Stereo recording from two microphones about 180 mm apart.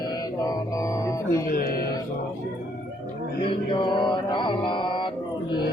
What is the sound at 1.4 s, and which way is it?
Music, 55° left (ahead or behind).